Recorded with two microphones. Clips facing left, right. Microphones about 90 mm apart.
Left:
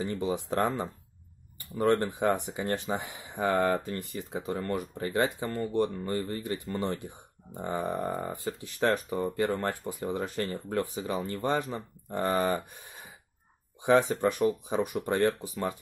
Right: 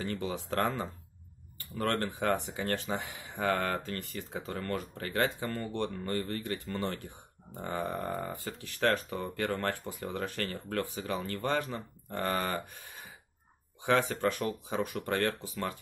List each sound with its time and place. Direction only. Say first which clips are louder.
0.0 s speech: left 4 dB; 20° left (ahead or behind)